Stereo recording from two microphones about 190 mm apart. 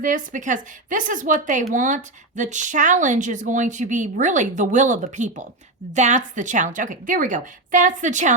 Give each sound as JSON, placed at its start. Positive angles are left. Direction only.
{"t": 0.0, "sound": "a woman's voice", "side_deg": -45}